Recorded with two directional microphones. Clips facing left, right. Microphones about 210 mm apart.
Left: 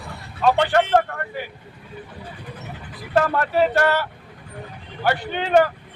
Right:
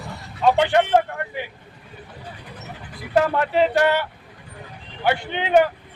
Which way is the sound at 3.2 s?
15° right (ahead or behind).